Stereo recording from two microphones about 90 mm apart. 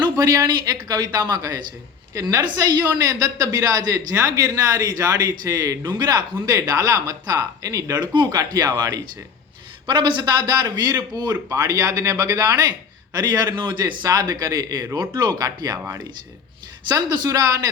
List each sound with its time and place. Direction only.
0.0 s a man's voice: 45° right (ahead or behind)
8.0 s a man's voice: 55° right (ahead or behind)
9.8 s a man's voice: 60° right (ahead or behind); by 15.8 s 40° right (ahead or behind)
16.9 s a man's voice: 45° right (ahead or behind)